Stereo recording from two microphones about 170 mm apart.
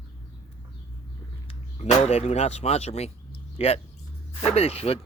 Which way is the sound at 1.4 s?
40° left (ahead or behind).